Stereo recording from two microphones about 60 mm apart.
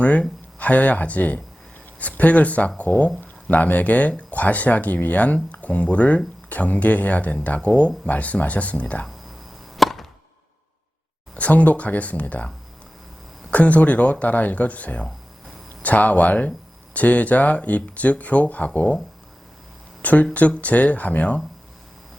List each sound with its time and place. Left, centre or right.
0.0 s speech: left
9.7 s chop: centre
11.3 s speech: left
20.0 s speech: left